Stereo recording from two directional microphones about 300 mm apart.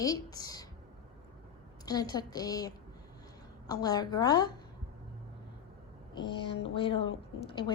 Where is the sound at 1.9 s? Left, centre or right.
Centre.